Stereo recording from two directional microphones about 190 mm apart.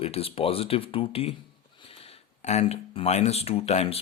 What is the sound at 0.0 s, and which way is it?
Speech, 30° left (ahead or behind).